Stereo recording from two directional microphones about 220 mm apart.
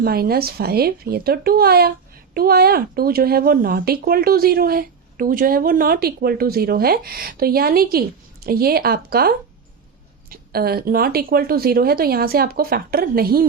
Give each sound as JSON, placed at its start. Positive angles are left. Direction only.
{"t": 0.0, "sound": "speech", "side_deg": -45}